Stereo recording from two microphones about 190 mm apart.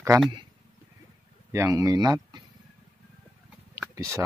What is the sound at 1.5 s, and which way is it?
Speech, 15° right (ahead or behind).